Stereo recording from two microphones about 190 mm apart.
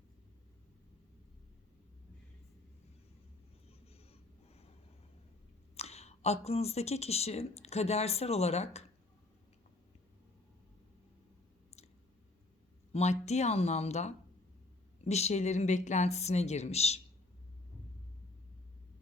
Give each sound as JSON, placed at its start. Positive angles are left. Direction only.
{"t": 3.9, "sound": "a sound", "side_deg": 30}
{"t": 5.7, "sound": "speech", "side_deg": 35}
{"t": 12.9, "sound": "a woman's voice", "side_deg": 35}